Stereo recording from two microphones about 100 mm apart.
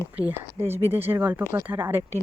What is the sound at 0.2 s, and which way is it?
Speech, 20° right (ahead or behind).